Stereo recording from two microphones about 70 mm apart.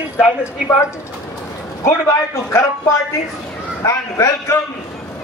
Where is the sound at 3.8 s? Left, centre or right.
Left.